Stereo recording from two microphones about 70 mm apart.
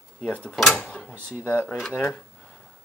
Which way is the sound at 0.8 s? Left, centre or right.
Centre.